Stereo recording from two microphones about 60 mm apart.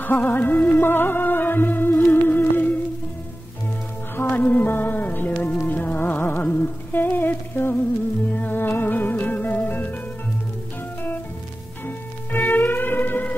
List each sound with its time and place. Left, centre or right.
0.0 s music: left
4.3 s music: left
7.2 s humming: left
8.3 s music: left
11.8 s music: left